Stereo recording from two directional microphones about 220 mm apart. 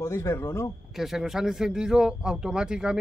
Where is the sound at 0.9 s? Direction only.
Centre (ahead or behind).